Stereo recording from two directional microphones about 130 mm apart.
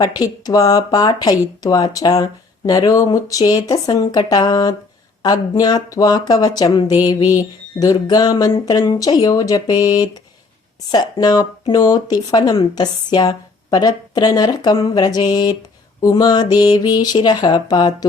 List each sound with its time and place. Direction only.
0.0 s speech: 30° left (ahead or behind)
7.8 s a sound: 30° left (ahead or behind)
8.6 s speech: 30° left (ahead or behind)